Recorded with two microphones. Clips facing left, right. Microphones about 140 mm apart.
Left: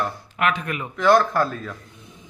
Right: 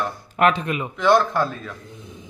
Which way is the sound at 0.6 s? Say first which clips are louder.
Right 3 dB; 20° right (ahead or behind).